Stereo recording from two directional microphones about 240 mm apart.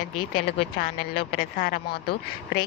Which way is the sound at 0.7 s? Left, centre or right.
Left.